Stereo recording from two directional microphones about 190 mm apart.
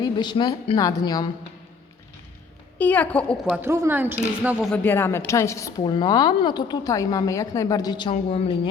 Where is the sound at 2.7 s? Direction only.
10° left (ahead or behind).